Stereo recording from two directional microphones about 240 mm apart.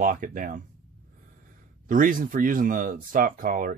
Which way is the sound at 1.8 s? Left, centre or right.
Right.